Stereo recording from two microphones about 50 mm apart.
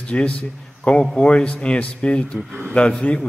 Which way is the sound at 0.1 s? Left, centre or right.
Left.